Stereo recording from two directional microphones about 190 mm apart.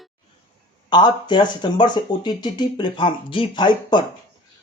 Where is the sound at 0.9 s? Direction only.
25° left (ahead or behind).